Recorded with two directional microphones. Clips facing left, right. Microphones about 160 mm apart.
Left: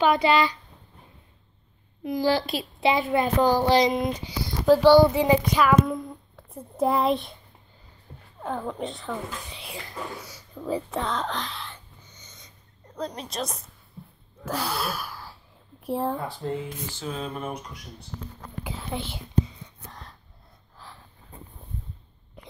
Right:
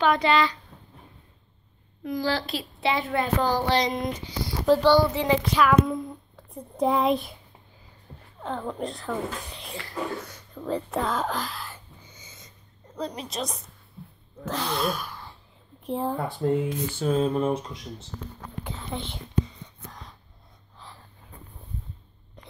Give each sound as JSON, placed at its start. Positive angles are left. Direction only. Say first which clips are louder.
{"t": 0.0, "sound": "a woman's voice", "louder": "left 1 dB", "side_deg": 10}
{"t": 2.0, "sound": "a woman's voice", "louder": "left 4 dB", "side_deg": 10}
{"t": 8.4, "sound": "speech", "louder": "even", "side_deg": 5}
{"t": 14.4, "sound": "sneeze", "louder": "right 2 dB", "side_deg": 10}
{"t": 15.8, "sound": "speech", "louder": "left 1 dB", "side_deg": 5}
{"t": 16.4, "sound": "speech", "louder": "right 6 dB", "side_deg": -50}
{"t": 18.6, "sound": "speech", "louder": "left 1 dB", "side_deg": 10}
{"t": 19.9, "sound": "a sound", "louder": "even", "side_deg": 0}
{"t": 20.7, "sound": "snort", "louder": "even", "side_deg": 0}
{"t": 22.4, "sound": "a sound", "louder": "left 2 dB", "side_deg": 10}